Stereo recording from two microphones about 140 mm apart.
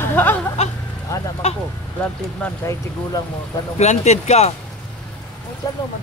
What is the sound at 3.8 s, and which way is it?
Speech, 55° left (ahead or behind).